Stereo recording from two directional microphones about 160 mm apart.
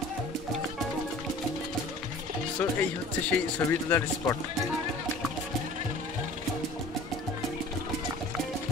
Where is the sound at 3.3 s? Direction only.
15° left (ahead or behind).